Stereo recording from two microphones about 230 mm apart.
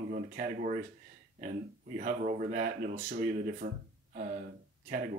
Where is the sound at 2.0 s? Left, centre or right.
Right.